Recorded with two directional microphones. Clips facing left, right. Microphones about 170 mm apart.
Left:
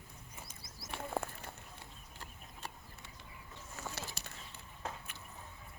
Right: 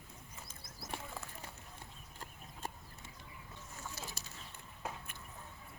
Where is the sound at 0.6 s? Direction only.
55° right (ahead or behind).